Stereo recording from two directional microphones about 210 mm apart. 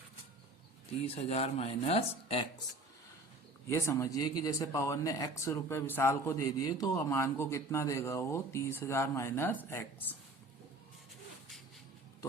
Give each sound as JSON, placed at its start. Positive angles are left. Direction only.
{"t": 1.0, "sound": "speech", "side_deg": 30}
{"t": 3.7, "sound": "speech", "side_deg": 15}